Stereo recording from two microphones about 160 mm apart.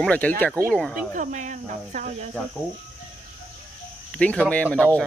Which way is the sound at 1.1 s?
50° right (ahead or behind).